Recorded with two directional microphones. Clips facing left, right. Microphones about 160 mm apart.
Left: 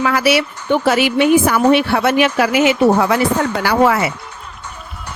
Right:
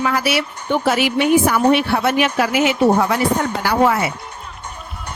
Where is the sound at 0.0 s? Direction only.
90° left.